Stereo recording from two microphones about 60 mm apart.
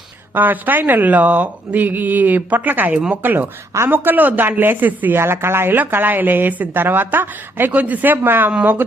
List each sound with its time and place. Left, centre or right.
0.3 s a woman's voice: right
5.2 s a woman's voice: right